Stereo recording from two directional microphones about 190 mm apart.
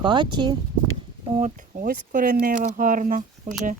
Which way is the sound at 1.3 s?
40° right (ahead or behind).